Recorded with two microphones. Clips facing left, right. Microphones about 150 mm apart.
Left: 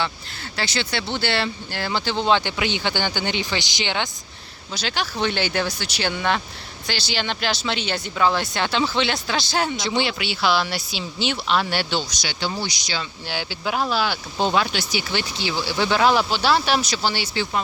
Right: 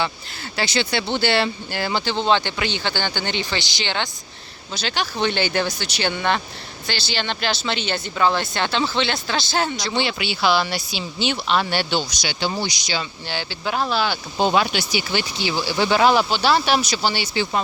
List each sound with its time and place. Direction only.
0.5 s speech: 15° right (ahead or behind)
12.3 s speech: 20° right (ahead or behind)
13.2 s speech: 5° left (ahead or behind)
14.3 s speech: 10° right (ahead or behind)